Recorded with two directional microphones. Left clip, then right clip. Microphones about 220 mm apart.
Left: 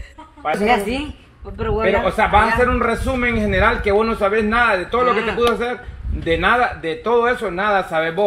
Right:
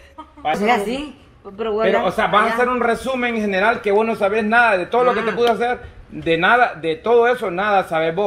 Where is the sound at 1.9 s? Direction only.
45° right (ahead or behind).